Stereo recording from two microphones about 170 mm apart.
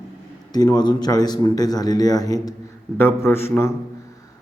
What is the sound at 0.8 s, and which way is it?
A man's voice, 25° left (ahead or behind).